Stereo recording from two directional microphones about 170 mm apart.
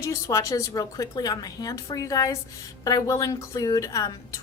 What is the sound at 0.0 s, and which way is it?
A woman's voice, 20° left (ahead or behind).